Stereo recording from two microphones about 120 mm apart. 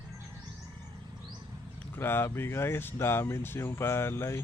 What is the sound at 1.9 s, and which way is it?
Speech, 20° left (ahead or behind).